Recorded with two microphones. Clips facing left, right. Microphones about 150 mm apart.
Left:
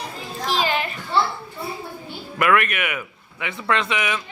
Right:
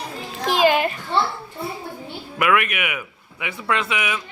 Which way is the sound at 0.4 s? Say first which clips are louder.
Right 6 dB; 55° right (ahead or behind).